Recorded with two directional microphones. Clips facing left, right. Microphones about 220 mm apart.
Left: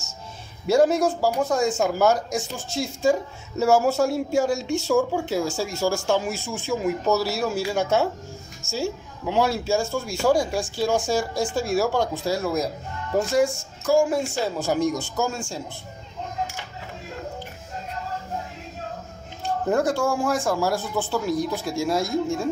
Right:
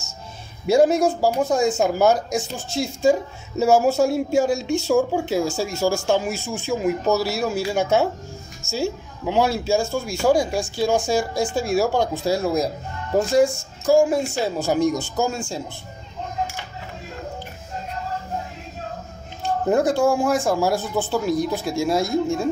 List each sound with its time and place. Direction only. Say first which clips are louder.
0.7 s a woman's voice: right 2 dB; 15° right (ahead or behind)
19.7 s a woman's voice: right 4 dB; 20° right (ahead or behind)